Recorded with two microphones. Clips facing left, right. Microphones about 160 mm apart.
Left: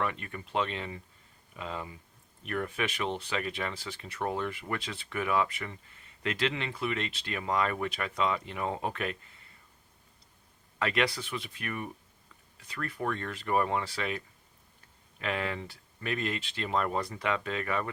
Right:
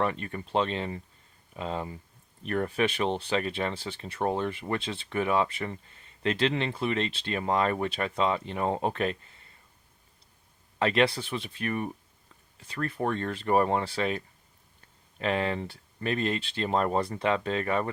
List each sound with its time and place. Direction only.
0.0 s speech: 35° right (ahead or behind)
10.8 s speech: 30° right (ahead or behind)
15.2 s speech: 35° right (ahead or behind)